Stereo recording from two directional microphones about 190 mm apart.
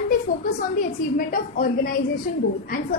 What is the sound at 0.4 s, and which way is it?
A woman's voice, 45° left (ahead or behind).